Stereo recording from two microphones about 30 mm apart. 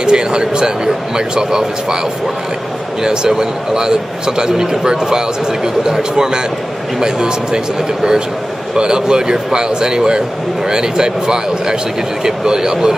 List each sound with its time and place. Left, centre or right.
0.0 s a man's voice: right
3.0 s a man's voice: right